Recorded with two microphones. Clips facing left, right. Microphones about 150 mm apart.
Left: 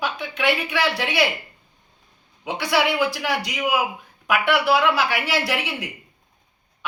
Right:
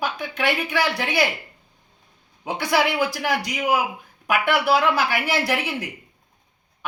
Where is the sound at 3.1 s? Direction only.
45° right (ahead or behind).